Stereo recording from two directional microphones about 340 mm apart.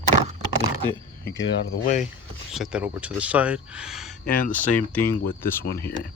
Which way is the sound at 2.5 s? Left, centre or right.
Centre.